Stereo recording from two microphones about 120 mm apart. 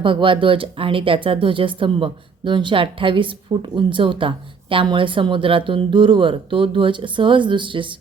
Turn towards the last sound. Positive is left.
turn(degrees=-45)  # may be behind; listen again after turning